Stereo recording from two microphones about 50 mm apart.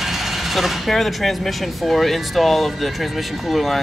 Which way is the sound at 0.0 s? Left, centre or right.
Centre.